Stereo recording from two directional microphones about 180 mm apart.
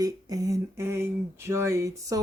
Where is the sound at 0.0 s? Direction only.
20° right (ahead or behind).